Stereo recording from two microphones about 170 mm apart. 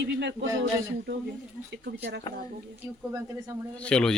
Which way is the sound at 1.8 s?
75° right (ahead or behind).